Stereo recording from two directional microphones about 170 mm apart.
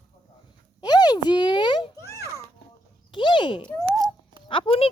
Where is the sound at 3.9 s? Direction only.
20° right (ahead or behind).